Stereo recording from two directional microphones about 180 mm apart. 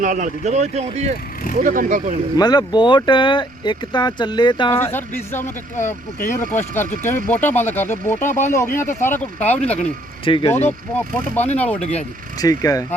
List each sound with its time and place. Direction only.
0.0 s speech: 45° right (ahead or behind)
1.6 s speech: 50° right (ahead or behind)
2.3 s speech: 25° left (ahead or behind)
4.7 s speech: 15° left (ahead or behind)
5.7 s speech: 45° left (ahead or behind)
7.1 s speech: 10° left (ahead or behind)
10.2 s speech: 25° left (ahead or behind)
10.5 s speech: 10° left (ahead or behind)
11.8 s speech: 40° left (ahead or behind)
12.4 s speech: 20° left (ahead or behind)